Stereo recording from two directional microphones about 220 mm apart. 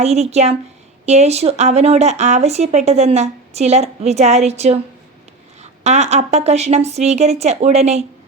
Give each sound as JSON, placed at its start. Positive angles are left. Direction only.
{"t": 0.0, "sound": "speech", "side_deg": -30}
{"t": 5.8, "sound": "speech", "side_deg": -30}